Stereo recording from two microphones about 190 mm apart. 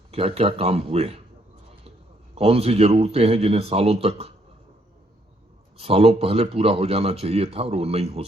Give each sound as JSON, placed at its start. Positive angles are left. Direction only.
{"t": 0.1, "sound": "speech", "side_deg": -30}
{"t": 2.3, "sound": "speech", "side_deg": -35}
{"t": 5.7, "sound": "speech", "side_deg": -30}